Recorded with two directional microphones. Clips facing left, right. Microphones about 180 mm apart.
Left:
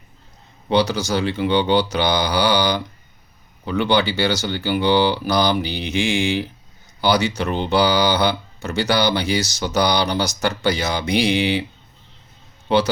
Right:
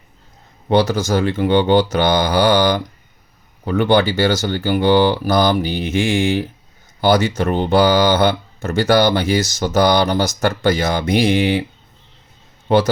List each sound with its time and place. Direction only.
0.7 s speech: 50° right (ahead or behind)
12.6 s speech: 50° right (ahead or behind)